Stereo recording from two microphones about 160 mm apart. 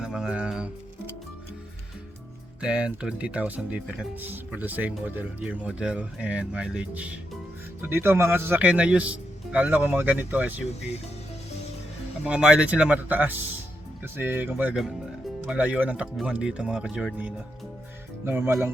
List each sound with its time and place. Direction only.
0.0 s music: 5° right (ahead or behind)
2.6 s speech: 5° right (ahead or behind)
12.2 s speech: 5° right (ahead or behind)